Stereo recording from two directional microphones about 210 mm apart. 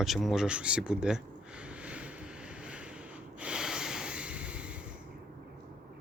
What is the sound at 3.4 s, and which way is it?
Snort, 5° right (ahead or behind).